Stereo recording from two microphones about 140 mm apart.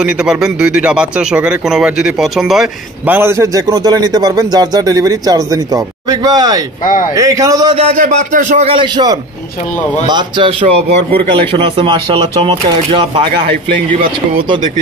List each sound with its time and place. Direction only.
0.0 s speech: 5° right (ahead or behind)
3.1 s a man's voice: 15° right (ahead or behind)
6.8 s speech: 70° left (ahead or behind)
7.2 s a man's voice: 25° right (ahead or behind)
7.7 s speech: 55° right (ahead or behind)
8.7 s a man's voice: 30° right (ahead or behind)